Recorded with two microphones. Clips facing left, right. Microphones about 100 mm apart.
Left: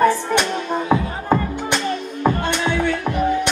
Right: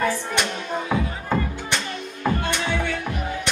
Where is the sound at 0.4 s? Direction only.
40° left (ahead or behind).